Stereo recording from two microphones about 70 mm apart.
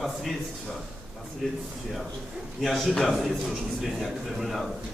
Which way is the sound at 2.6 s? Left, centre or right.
Centre.